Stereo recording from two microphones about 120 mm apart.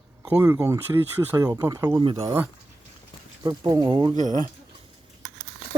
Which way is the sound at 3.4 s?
35° right (ahead or behind).